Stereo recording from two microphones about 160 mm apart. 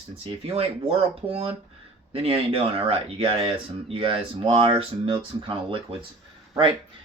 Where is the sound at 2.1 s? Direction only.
35° right (ahead or behind).